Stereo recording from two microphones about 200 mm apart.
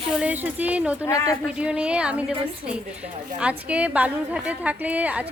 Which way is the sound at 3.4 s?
5° right (ahead or behind).